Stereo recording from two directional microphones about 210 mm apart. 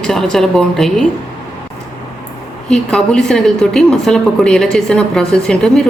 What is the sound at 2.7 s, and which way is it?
A woman's voice, 5° left (ahead or behind).